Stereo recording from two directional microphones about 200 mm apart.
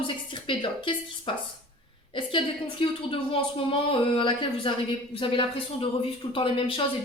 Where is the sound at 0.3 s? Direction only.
25° left (ahead or behind).